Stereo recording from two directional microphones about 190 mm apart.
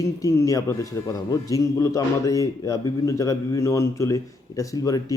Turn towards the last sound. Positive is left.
turn(degrees=20)  # may be behind; listen again after turning